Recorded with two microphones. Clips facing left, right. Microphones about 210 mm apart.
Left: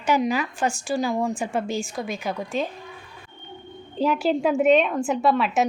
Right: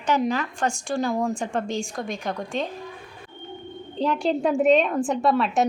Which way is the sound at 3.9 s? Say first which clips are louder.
Left 1 dB; 5° left (ahead or behind).